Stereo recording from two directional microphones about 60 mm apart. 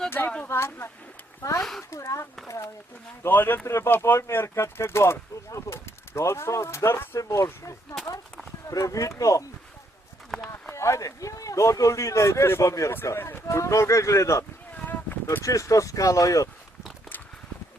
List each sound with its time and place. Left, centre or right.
0.4 s speech: left
1.4 s speech: left
3.2 s speech: left
5.5 s speech: left
7.2 s speech: left
10.8 s speech: left
13.1 s speech: left
13.5 s speech: left
14.8 s a sound: left
15.4 s speech: left